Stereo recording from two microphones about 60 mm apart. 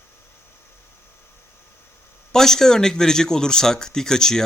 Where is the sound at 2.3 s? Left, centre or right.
Centre.